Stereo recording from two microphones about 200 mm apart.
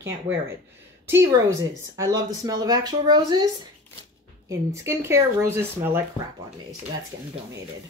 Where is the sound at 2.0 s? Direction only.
20° right (ahead or behind).